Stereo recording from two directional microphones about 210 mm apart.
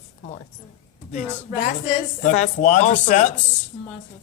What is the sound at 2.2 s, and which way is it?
Speech, 35° left (ahead or behind).